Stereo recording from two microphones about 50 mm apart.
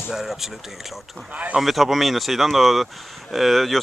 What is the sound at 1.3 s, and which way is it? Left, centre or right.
Speech, right.